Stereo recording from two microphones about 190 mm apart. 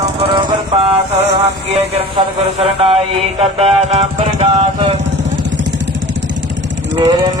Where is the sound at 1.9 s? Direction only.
30° right (ahead or behind).